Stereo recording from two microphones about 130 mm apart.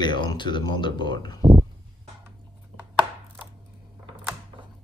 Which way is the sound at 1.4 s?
30° right (ahead or behind).